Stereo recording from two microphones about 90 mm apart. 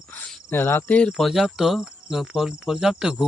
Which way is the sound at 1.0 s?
5° left (ahead or behind).